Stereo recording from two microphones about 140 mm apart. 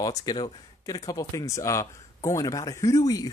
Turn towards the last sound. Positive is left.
turn(degrees=25)  # may be behind; listen again after turning